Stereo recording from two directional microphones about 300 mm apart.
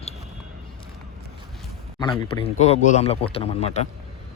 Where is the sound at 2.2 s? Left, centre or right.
Centre.